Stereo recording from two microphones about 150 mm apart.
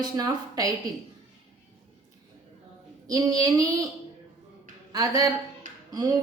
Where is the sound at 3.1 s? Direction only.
25° right (ahead or behind).